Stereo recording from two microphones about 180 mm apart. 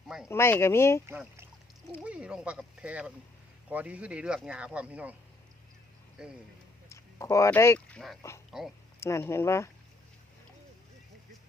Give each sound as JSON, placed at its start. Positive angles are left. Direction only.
{"t": 0.3, "sound": "speech", "side_deg": 15}
{"t": 1.0, "sound": "speech", "side_deg": -10}
{"t": 6.2, "sound": "speech", "side_deg": -5}
{"t": 6.8, "sound": "speech", "side_deg": 15}
{"t": 9.0, "sound": "speech", "side_deg": 15}